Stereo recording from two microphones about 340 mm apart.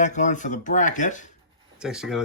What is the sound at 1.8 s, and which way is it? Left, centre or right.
Speech, centre.